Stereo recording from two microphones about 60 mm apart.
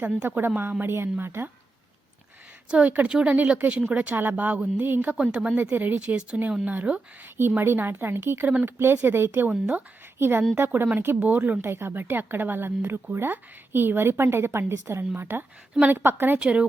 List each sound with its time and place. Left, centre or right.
0.3 s speech: right
2.6 s speech: right
5.1 s speech: centre
5.7 s speech: right
7.3 s speech: right
9.5 s speech: right
10.2 s speech: right
16.4 s speech: centre